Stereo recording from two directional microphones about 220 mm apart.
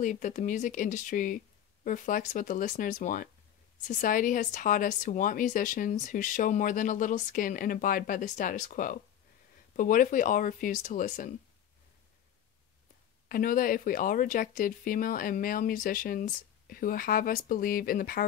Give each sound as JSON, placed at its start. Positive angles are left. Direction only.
{"t": 0.0, "sound": "speech", "side_deg": 35}
{"t": 13.3, "sound": "speech", "side_deg": 40}